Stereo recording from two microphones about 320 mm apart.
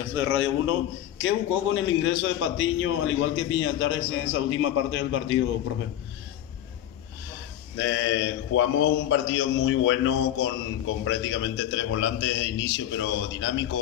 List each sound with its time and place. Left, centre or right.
0.1 s a man's voice: left
7.7 s a man's voice: left